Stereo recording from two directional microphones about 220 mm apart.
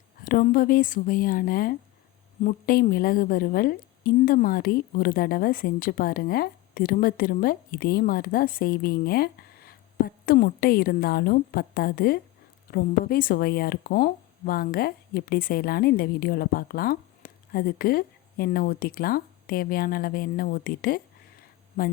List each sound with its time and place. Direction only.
0.3 s a woman's voice: 40° left (ahead or behind)